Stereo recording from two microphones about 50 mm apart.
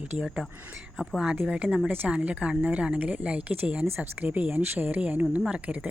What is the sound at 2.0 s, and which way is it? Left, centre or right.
Speech, right.